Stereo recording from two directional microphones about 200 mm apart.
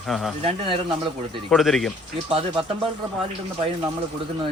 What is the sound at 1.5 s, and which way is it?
Speech, centre (ahead or behind).